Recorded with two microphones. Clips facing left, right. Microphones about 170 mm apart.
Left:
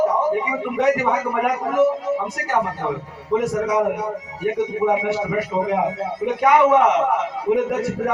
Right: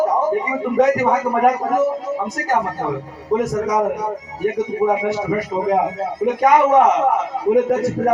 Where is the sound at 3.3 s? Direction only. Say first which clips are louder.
Right 1 dB; 40° right (ahead or behind).